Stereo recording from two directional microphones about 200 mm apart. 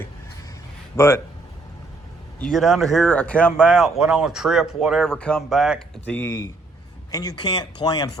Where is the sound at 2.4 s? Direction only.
Centre (ahead or behind).